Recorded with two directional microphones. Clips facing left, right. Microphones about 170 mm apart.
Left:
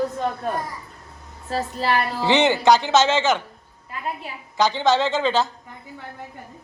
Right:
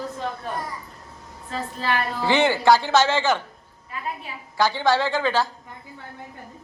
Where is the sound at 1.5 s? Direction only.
35° left (ahead or behind).